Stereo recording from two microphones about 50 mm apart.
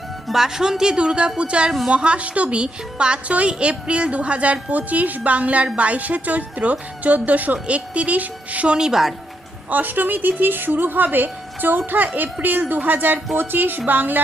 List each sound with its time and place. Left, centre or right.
0.3 s a woman's voice: centre; by 8.7 s right
8.7 s speech: centre
9.6 s a woman's voice: right